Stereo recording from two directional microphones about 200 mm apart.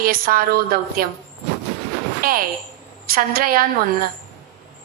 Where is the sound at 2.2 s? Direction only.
45° right (ahead or behind).